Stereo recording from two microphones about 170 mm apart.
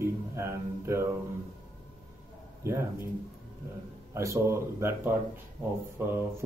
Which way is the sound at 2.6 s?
15° right (ahead or behind).